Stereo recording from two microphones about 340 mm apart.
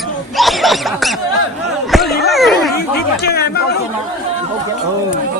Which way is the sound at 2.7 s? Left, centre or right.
Left.